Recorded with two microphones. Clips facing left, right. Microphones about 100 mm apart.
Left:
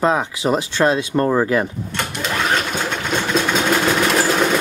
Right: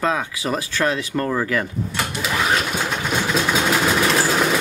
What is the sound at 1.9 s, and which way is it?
Sewing machine, 5° right (ahead or behind).